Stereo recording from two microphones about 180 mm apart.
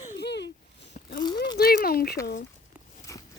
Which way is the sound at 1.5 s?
55° left (ahead or behind).